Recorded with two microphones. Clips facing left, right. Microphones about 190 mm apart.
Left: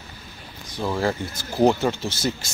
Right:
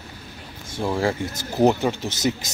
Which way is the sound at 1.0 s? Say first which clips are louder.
Right 1 dB; 25° right (ahead or behind).